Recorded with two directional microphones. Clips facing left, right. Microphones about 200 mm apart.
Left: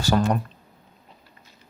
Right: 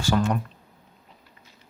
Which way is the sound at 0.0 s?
35° left (ahead or behind).